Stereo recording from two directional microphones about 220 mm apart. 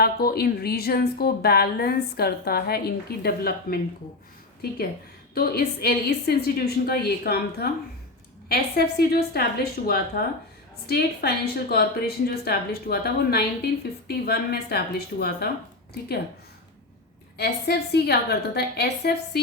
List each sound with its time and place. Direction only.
0.0 s a woman's voice: 45° left (ahead or behind)
5.3 s a woman's voice: 45° left (ahead or behind)
17.3 s a woman's voice: 45° left (ahead or behind)